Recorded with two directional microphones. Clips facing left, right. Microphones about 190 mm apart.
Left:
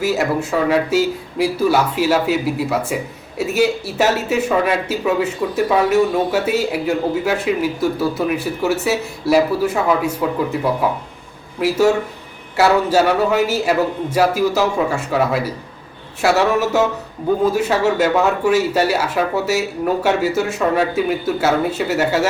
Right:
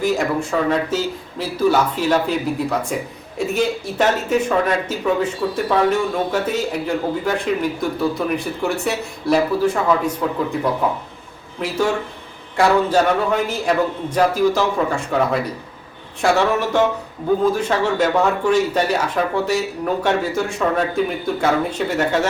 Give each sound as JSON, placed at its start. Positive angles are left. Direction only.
{"t": 0.0, "sound": "speech", "side_deg": 5}
{"t": 12.5, "sound": "speech", "side_deg": 5}